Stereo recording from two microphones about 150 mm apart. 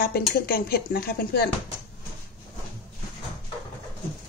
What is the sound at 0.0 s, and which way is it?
Speech, 85° left.